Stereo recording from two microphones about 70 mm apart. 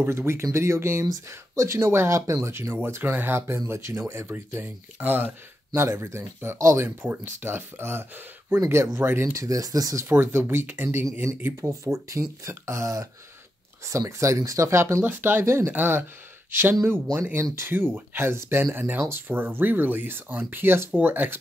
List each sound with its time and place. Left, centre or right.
0.0 s speech: right
2.7 s speech: right
5.8 s speech: right
7.0 s speech: right
9.3 s speech: right
10.0 s speech: right
11.7 s speech: right
15.0 s speech: right